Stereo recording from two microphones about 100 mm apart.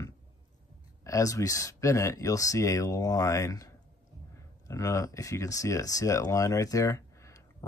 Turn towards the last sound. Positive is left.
turn(degrees=35)  # may be behind; listen again after turning